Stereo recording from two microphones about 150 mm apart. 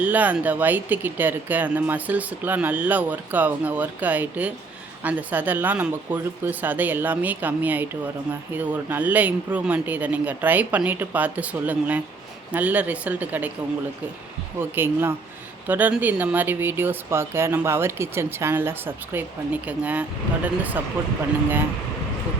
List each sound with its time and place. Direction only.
0.0 s speech: 10° right (ahead or behind)
14.6 s speech: 15° right (ahead or behind)